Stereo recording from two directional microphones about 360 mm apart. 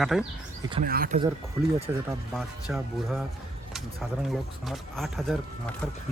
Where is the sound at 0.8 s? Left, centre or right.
Right.